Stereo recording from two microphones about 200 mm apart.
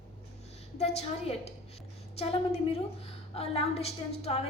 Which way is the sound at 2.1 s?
30° left (ahead or behind).